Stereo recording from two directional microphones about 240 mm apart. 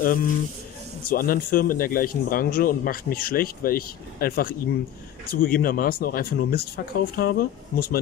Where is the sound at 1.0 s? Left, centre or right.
Left.